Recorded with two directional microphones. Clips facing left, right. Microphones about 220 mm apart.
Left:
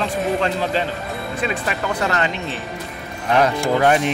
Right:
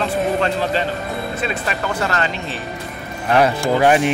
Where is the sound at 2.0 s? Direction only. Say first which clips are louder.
Left 1 dB; 15° left (ahead or behind).